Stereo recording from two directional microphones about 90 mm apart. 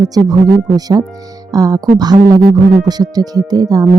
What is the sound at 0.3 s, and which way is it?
Speech, 45° right (ahead or behind).